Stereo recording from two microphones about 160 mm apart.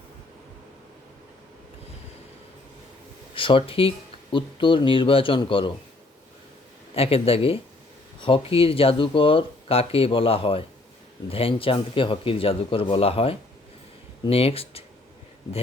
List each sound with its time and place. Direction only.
3.3 s speech: 30° left (ahead or behind)
6.9 s speech: 35° left (ahead or behind)